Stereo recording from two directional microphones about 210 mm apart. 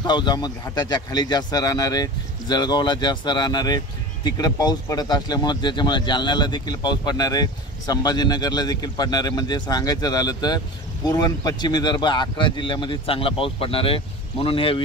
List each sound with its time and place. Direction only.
0.0 s speech: 20° left (ahead or behind)